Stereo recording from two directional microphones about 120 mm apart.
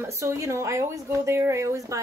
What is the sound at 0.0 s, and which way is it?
Speech, 25° right (ahead or behind).